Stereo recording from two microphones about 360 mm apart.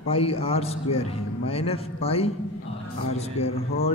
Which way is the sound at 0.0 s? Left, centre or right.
Centre.